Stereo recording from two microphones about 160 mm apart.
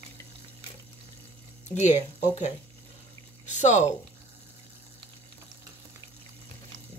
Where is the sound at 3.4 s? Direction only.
45° left (ahead or behind).